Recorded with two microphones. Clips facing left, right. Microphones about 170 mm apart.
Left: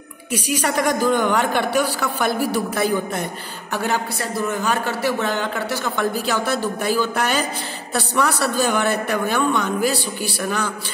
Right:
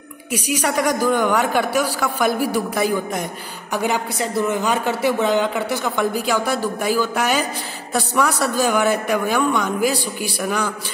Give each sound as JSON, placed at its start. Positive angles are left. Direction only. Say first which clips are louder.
{"t": 0.7, "sound": "a man's voice", "louder": "even", "side_deg": -10}